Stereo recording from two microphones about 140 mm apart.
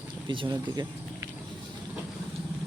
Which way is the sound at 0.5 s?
25° right (ahead or behind).